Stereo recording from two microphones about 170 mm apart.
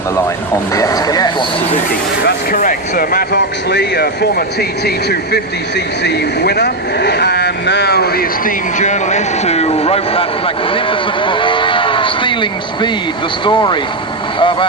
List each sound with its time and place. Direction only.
0.7 s speech: 20° left (ahead or behind)
2.2 s speech: 55° left (ahead or behind)
8.8 s speech: 45° left (ahead or behind); by 13.7 s 25° left (ahead or behind)
14.3 s vehicle: 30° left (ahead or behind)